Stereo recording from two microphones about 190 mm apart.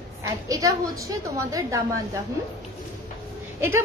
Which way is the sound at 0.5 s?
20° right (ahead or behind).